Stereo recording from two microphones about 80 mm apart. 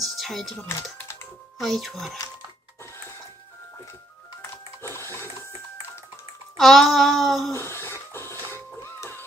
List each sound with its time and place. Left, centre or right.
0.0 s music: centre
0.8 s typing: left
1.6 s child singing: centre
4.4 s sewing machine: left
6.6 s child singing: centre
7.5 s a sound: left
9.0 s music: left